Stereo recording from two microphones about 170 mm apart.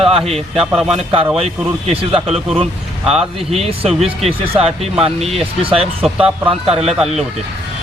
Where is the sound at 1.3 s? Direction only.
35° right (ahead or behind).